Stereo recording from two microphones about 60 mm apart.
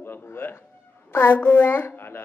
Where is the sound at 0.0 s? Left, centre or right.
Left.